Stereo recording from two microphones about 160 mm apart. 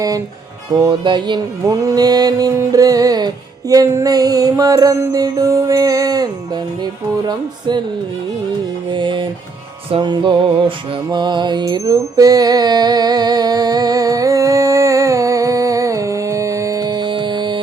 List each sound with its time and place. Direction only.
0.7 s music: 25° right (ahead or behind)
8.9 s music: 30° right (ahead or behind)